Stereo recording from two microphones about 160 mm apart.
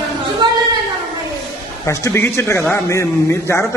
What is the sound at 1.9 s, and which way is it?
A man's voice, 15° left (ahead or behind).